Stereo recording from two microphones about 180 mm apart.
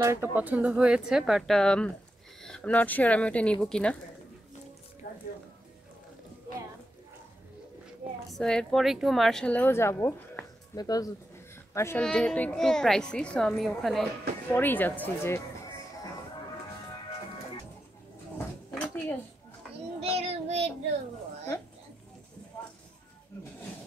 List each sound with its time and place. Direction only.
0.0 s a woman's voice: 15° right (ahead or behind); by 3.9 s 5° left (ahead or behind)
5.0 s a sound: 50° left (ahead or behind)
8.3 s a woman's voice: 5° left (ahead or behind)
18.8 s dishes: 10° left (ahead or behind)
20.0 s child singing: 35° right (ahead or behind)